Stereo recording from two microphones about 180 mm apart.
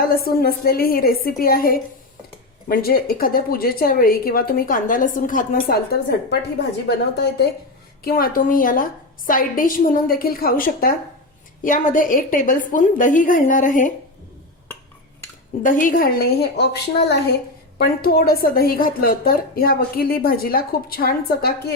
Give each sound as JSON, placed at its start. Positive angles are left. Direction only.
{"t": 0.3, "sound": "a woman's voice", "side_deg": 55}
{"t": 8.0, "sound": "a woman's voice", "side_deg": 55}
{"t": 15.6, "sound": "a woman's voice", "side_deg": 50}